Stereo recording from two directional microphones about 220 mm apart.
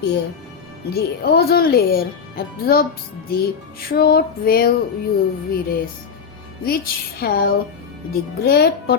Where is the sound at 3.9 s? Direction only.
45° left (ahead or behind).